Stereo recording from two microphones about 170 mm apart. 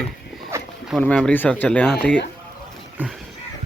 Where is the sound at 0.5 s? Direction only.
15° right (ahead or behind).